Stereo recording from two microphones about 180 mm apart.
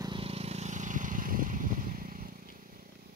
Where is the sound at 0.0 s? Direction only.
30° right (ahead or behind); by 2.9 s 50° right (ahead or behind).